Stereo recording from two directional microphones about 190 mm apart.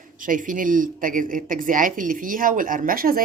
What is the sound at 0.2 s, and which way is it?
Speech, 45° right (ahead or behind).